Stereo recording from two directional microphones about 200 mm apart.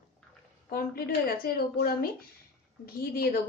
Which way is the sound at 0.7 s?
45° left (ahead or behind).